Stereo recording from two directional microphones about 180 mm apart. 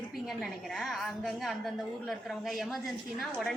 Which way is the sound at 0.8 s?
Centre (ahead or behind).